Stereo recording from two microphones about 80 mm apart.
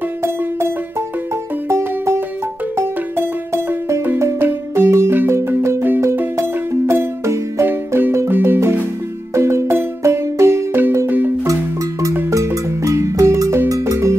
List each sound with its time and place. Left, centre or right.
0.2 s music: right
11.4 s music: right